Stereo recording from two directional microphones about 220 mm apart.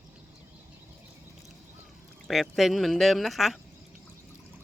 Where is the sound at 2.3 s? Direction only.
Centre (ahead or behind).